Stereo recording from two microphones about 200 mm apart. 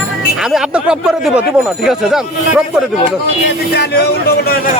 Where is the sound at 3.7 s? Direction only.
55° left (ahead or behind).